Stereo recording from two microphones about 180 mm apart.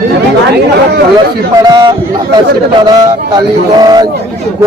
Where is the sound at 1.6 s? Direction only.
25° right (ahead or behind).